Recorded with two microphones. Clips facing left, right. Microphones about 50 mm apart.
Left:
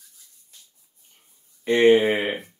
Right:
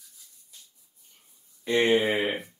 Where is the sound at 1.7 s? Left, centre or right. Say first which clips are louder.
Left 6 dB; left.